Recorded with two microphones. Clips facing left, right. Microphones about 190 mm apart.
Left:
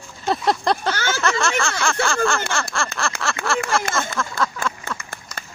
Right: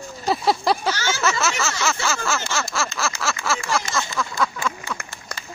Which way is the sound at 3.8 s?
55° left (ahead or behind).